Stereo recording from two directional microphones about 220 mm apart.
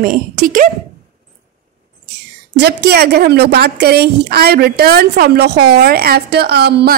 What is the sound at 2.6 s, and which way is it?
A woman's voice, 45° right (ahead or behind).